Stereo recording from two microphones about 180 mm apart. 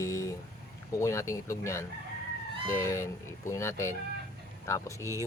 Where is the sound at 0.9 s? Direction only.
15° left (ahead or behind).